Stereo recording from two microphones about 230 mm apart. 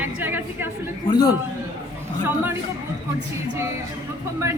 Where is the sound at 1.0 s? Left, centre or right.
Centre.